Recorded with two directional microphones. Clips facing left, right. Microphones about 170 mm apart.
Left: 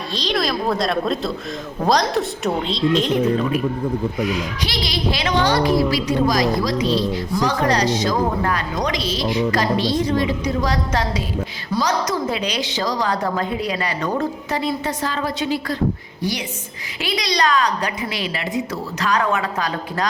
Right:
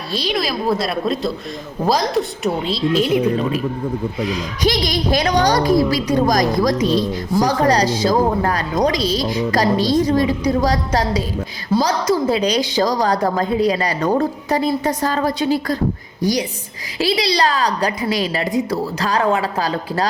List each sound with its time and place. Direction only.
0.1 s a woman's voice: 10° right (ahead or behind)
4.6 s a woman's voice: 45° right (ahead or behind)
7.4 s a woman's voice: 35° right (ahead or behind)